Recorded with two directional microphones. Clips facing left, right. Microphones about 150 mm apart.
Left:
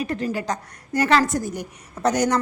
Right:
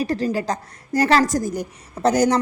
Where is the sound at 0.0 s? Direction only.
35° right (ahead or behind).